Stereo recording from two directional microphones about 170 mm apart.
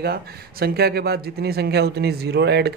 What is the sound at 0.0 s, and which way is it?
Speech, 65° right (ahead or behind).